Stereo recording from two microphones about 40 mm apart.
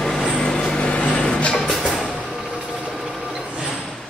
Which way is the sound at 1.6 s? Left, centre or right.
Centre.